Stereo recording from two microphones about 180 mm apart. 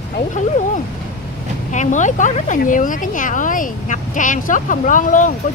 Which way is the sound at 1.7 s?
40° left (ahead or behind).